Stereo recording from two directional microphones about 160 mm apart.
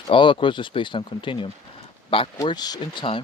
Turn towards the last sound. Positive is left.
turn(degrees=30)  # may be behind; listen again after turning